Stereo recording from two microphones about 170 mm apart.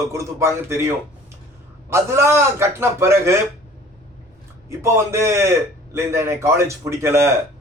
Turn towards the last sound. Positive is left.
turn(degrees=-15)  # may be behind; listen again after turning